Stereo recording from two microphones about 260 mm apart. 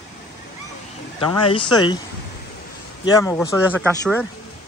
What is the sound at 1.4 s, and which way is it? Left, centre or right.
Speech, centre.